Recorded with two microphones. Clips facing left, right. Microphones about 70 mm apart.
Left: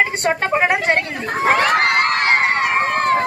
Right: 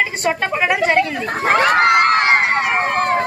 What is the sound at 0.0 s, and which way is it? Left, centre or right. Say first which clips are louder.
Speech: left 1 dB; left.